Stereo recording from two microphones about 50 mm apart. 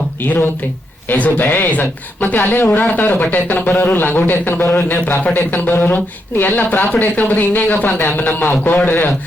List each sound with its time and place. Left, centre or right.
0.2 s speech: left